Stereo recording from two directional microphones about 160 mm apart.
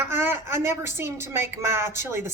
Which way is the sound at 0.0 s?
15° right (ahead or behind).